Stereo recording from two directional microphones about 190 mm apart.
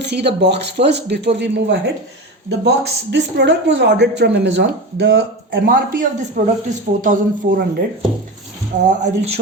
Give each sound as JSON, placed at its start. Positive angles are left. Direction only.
{"t": 0.0, "sound": "speech", "side_deg": -60}
{"t": 8.8, "sound": "speech", "side_deg": -35}